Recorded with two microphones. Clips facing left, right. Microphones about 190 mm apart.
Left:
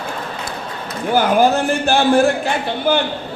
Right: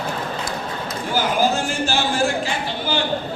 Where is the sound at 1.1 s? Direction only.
60° left (ahead or behind).